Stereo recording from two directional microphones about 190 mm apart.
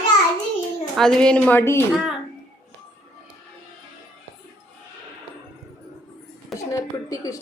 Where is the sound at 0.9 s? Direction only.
5° left (ahead or behind).